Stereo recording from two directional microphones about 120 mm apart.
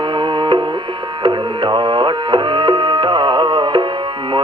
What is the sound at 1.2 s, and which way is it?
Music, 40° right (ahead or behind).